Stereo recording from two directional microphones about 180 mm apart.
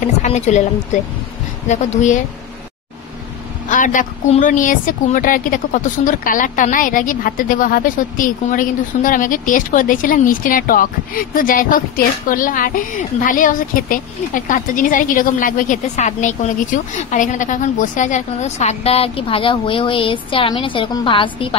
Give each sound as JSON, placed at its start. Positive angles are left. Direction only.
{"t": 0.0, "sound": "a woman's voice", "side_deg": 40}
{"t": 2.0, "sound": "a woman's voice", "side_deg": 45}
{"t": 3.6, "sound": "a woman's voice", "side_deg": 45}